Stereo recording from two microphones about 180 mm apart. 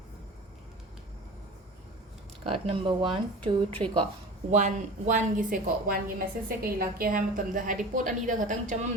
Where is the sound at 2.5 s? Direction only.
30° right (ahead or behind).